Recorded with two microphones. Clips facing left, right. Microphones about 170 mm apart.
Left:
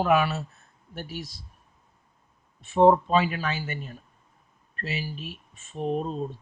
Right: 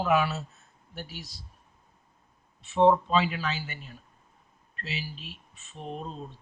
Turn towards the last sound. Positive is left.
turn(degrees=50)  # may be behind; listen again after turning